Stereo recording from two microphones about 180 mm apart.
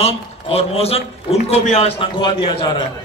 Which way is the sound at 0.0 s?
35° left (ahead or behind).